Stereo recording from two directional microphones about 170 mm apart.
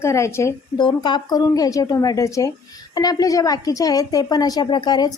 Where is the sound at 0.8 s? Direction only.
25° left (ahead or behind).